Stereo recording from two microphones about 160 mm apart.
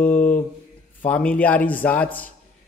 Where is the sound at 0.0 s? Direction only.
10° left (ahead or behind).